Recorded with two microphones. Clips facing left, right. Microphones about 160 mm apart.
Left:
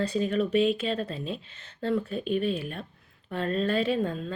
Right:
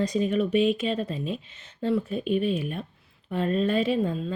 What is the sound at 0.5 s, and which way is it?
Speech, 35° left (ahead or behind).